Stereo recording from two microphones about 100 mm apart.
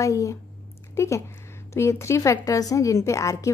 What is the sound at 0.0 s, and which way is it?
A woman's voice, 35° left (ahead or behind).